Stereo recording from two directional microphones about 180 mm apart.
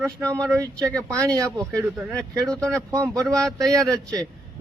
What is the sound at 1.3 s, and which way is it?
Speech, 20° right (ahead or behind).